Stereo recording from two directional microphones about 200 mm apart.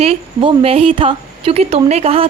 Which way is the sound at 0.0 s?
30° right (ahead or behind).